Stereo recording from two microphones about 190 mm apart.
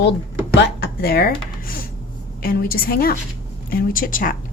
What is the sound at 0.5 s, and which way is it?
A woman's voice, 60° left (ahead or behind).